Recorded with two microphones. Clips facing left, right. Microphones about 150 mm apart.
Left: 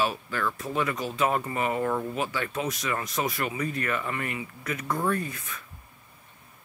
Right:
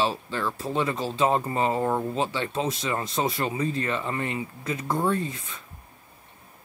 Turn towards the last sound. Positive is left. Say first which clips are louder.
# right 2 dB
turn(degrees=-25)  # may be behind; listen again after turning